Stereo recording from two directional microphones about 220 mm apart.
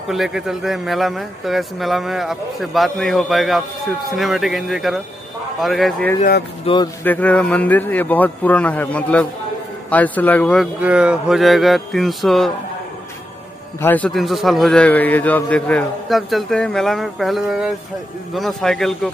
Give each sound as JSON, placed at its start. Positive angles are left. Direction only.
{"t": 0.1, "sound": "a man's voice", "side_deg": 0}
{"t": 6.6, "sound": "speech", "side_deg": 20}
{"t": 7.0, "sound": "a man's voice", "side_deg": 5}
{"t": 13.7, "sound": "a man's voice", "side_deg": 10}